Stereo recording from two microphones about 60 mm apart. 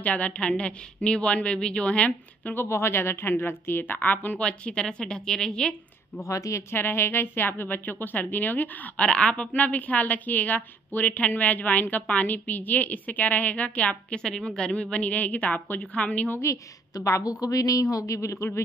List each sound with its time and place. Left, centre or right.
0.0 s a woman's voice: left
2.5 s speech: left
4.5 s a woman's voice: centre
6.2 s speech: left
6.7 s speech: left; by 9.5 s centre
9.5 s a woman's voice: left
16.9 s a woman's voice: left